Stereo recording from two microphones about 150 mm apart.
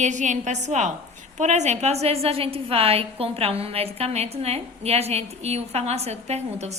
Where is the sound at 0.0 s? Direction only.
55° right (ahead or behind).